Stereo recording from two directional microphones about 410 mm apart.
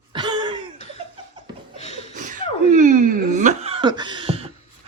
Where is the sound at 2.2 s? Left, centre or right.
Centre.